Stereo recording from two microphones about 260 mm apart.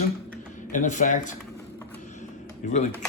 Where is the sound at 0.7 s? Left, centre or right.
Left.